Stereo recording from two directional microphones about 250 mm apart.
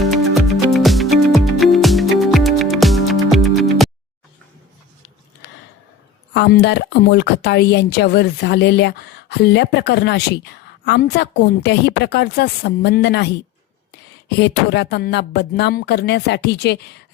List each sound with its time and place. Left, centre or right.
0.0 s music: centre
6.3 s speech: left